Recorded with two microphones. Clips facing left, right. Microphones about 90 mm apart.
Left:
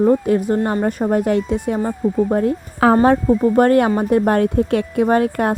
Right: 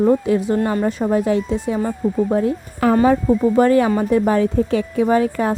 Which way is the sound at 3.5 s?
55° left (ahead or behind).